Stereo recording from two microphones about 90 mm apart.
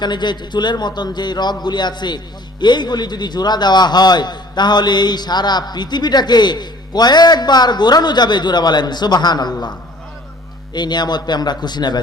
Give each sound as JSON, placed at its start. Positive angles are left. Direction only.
{"t": 0.0, "sound": "a man's voice", "side_deg": 55}
{"t": 10.8, "sound": "a man's voice", "side_deg": 55}